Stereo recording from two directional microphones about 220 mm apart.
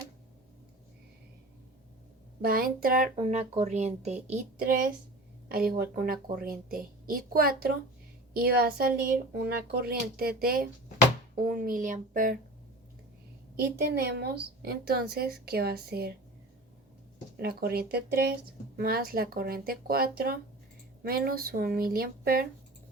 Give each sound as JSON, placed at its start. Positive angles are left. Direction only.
{"t": 2.4, "sound": "speech", "side_deg": -40}
{"t": 3.2, "sound": "speech", "side_deg": -30}
{"t": 5.5, "sound": "speech", "side_deg": -45}
{"t": 13.6, "sound": "speech", "side_deg": -45}
{"t": 17.3, "sound": "speech", "side_deg": -45}